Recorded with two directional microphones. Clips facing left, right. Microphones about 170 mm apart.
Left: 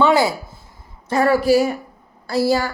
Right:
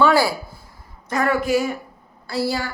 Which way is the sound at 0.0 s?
20° left (ahead or behind).